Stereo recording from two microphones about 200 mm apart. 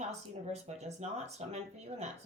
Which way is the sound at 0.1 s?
35° right (ahead or behind).